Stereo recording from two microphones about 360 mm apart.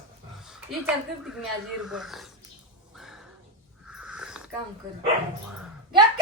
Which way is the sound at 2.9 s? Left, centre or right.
Centre.